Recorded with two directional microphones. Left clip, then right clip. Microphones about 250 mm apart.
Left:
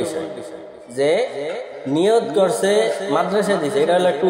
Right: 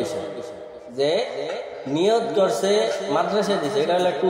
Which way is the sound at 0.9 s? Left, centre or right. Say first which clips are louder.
Left 4 dB; left.